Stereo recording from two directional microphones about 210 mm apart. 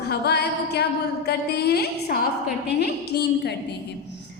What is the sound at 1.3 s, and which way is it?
A woman's voice, 50° left (ahead or behind).